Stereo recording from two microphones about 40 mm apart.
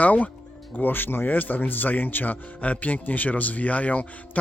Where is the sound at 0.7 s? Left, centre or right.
Left.